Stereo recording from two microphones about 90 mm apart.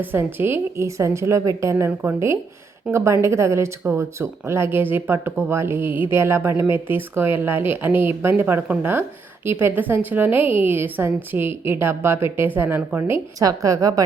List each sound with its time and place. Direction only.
0.0 s speech: 25° right (ahead or behind)
13.4 s a woman's voice: 40° right (ahead or behind)